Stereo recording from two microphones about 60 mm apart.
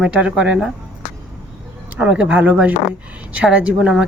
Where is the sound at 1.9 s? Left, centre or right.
Right.